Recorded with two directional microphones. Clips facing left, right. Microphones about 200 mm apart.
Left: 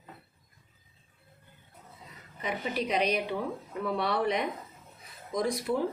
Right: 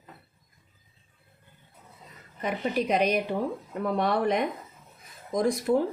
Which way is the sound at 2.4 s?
50° right (ahead or behind).